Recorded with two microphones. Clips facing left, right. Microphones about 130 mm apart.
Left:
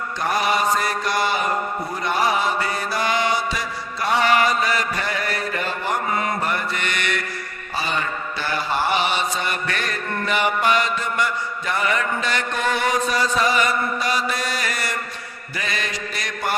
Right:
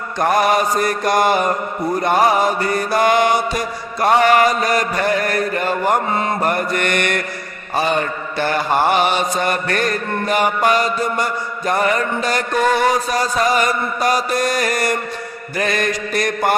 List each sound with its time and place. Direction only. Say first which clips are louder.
0.2 s mantra: right 6 dB; 50° right (ahead or behind)